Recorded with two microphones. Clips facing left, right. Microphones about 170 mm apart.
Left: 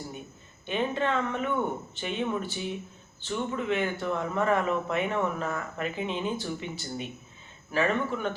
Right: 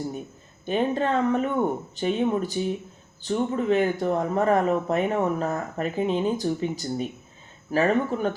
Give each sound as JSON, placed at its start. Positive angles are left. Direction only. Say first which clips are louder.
{"t": 0.6, "sound": "speech", "louder": "right 5 dB", "side_deg": -40}